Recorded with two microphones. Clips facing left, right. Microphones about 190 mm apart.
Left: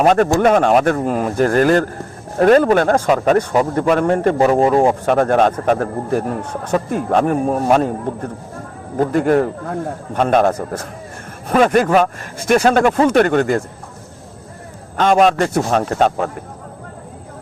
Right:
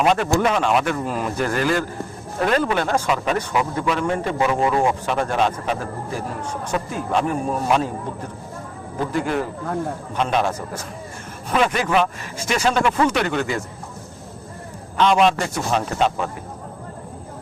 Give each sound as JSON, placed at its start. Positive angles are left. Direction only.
{"t": 0.0, "sound": "speech", "side_deg": 50}
{"t": 5.0, "sound": "a man's voice", "side_deg": 55}
{"t": 14.9, "sound": "speech", "side_deg": 45}